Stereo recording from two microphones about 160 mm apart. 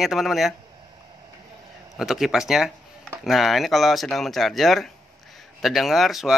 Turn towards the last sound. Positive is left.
turn(degrees=0)  # may be behind; listen again after turning